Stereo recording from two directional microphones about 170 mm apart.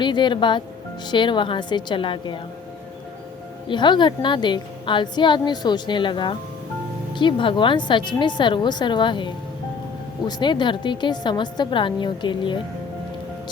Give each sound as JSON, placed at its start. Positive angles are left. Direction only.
{"t": 0.0, "sound": "a woman's voice", "side_deg": 25}
{"t": 3.7, "sound": "a woman's voice", "side_deg": 25}